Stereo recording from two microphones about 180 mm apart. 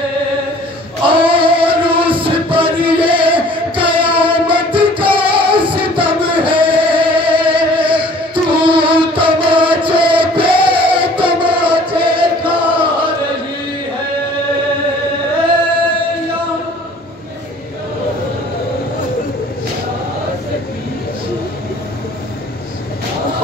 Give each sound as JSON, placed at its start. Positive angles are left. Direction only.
{"t": 1.0, "sound": "music", "side_deg": -30}
{"t": 9.8, "sound": "a sound", "side_deg": -30}
{"t": 10.9, "sound": "music", "side_deg": -30}